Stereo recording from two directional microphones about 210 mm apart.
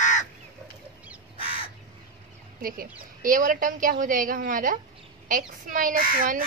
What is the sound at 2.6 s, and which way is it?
A woman's voice, 45° right (ahead or behind).